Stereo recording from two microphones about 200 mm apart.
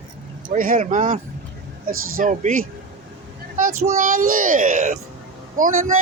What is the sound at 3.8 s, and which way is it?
Speech, 45° right (ahead or behind).